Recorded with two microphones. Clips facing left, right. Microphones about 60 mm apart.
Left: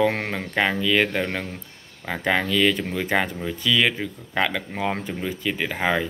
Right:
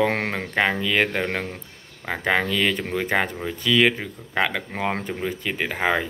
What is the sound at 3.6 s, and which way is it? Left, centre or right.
Speech, right.